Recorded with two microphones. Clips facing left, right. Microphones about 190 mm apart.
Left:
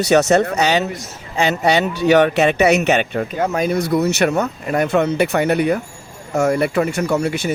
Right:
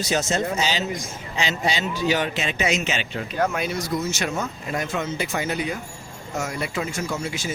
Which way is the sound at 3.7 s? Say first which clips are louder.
Left 9 dB; 60° left (ahead or behind).